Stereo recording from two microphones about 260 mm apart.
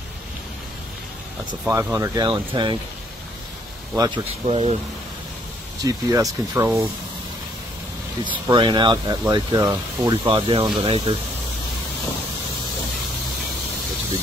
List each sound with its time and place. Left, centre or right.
1.5 s speech: centre
3.9 s speech: centre
5.9 s speech: centre
8.2 s speech: centre